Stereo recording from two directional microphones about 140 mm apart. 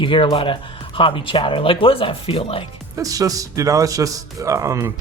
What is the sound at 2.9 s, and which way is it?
A man's voice, 25° right (ahead or behind).